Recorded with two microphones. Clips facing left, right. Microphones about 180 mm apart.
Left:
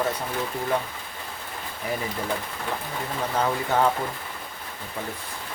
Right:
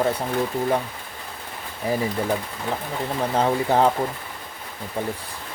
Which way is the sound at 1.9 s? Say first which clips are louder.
Right 6 dB; 30° right (ahead or behind).